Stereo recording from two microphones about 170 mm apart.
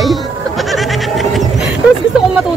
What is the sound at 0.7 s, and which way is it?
Goat, centre (ahead or behind).